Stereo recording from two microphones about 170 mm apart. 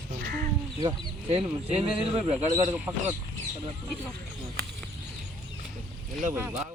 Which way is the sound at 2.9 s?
20° right (ahead or behind).